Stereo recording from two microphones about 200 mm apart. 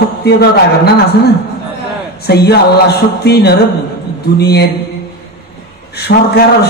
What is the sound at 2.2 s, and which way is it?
A man's voice, 55° left (ahead or behind).